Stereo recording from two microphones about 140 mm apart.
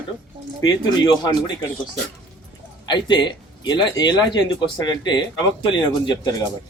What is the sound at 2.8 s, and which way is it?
A man's voice, 35° left (ahead or behind).